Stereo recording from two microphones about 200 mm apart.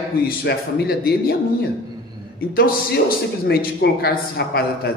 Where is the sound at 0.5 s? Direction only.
55° left (ahead or behind).